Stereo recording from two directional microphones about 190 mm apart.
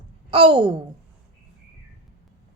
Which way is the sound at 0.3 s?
30° right (ahead or behind).